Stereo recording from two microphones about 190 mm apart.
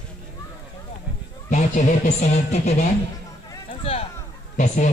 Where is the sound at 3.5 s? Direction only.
30° left (ahead or behind).